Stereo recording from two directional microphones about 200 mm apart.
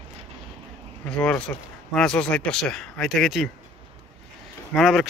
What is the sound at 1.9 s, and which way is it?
Speech, 5° left (ahead or behind).